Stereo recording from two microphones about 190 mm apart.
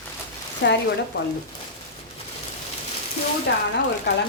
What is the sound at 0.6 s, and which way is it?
Speech, 65° left (ahead or behind).